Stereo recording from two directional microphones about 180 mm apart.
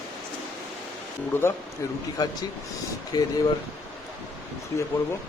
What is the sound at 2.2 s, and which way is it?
Speech, 20° left (ahead or behind).